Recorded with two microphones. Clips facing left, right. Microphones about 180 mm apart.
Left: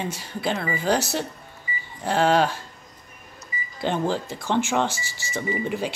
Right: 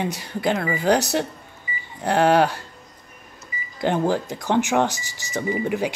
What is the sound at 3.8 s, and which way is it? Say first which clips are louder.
Speech: right 3 dB; 15° right (ahead or behind).